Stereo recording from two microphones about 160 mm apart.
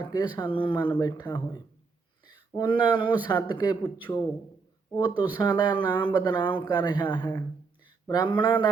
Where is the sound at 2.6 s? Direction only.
30° left (ahead or behind).